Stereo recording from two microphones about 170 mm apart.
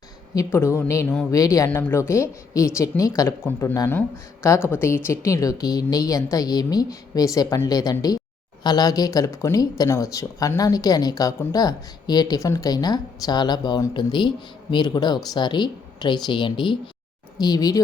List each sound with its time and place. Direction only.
0.3 s a woman's voice: 15° left (ahead or behind)